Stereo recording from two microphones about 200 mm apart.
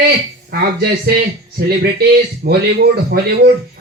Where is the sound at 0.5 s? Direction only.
50° right (ahead or behind).